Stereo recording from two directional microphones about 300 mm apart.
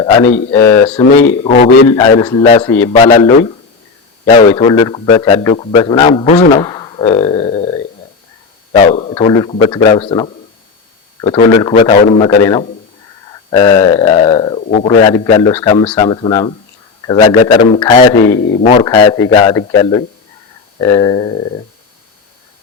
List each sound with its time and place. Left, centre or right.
0.0 s a man's voice: centre
0.9 s a man's voice: centre
8.8 s a man's voice: left
13.5 s a man's voice: centre